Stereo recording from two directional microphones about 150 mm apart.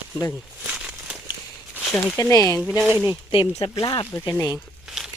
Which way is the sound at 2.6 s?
Centre (ahead or behind).